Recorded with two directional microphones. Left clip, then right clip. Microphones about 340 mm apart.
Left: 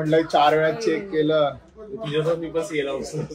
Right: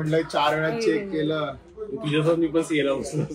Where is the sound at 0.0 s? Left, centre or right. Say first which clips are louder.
Left 5 dB; left.